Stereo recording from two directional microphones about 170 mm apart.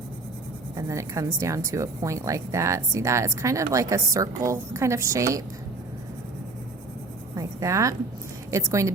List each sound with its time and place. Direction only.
0.8 s speech: 20° right (ahead or behind)
7.3 s writing: 20° right (ahead or behind)
8.4 s speech: 20° right (ahead or behind)